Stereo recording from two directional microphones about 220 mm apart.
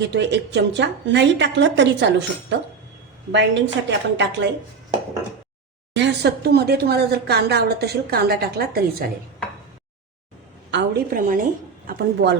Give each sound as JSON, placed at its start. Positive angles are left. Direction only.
{"t": 0.0, "sound": "speech", "side_deg": -50}
{"t": 5.9, "sound": "speech", "side_deg": -50}
{"t": 10.7, "sound": "speech", "side_deg": -50}